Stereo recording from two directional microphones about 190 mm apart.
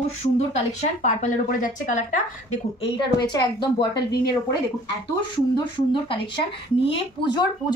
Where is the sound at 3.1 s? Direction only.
20° left (ahead or behind).